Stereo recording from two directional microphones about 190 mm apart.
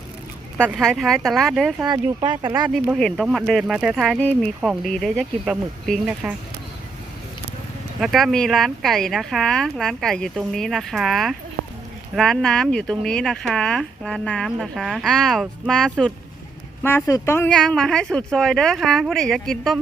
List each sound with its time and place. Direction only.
0.7 s speech: centre (ahead or behind)
1.8 s speech: 25° right (ahead or behind)
2.6 s speech: 5° right (ahead or behind)
8.0 s speech: centre (ahead or behind)